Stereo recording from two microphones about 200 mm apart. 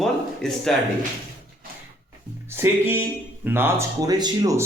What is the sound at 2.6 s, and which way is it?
Speech, 10° right (ahead or behind).